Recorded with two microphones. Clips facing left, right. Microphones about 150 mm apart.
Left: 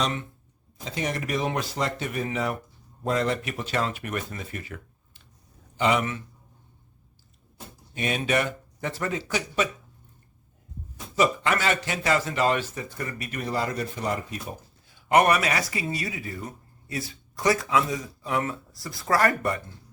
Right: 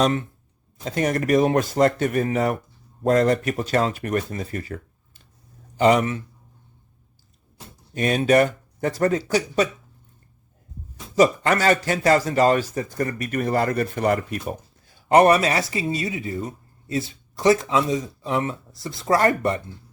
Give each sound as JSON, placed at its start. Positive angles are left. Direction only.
{"t": 0.9, "sound": "a man's voice", "side_deg": -50}
{"t": 7.9, "sound": "speech", "side_deg": -40}
{"t": 11.1, "sound": "a man's voice", "side_deg": -40}
{"t": 14.8, "sound": "speech", "side_deg": -35}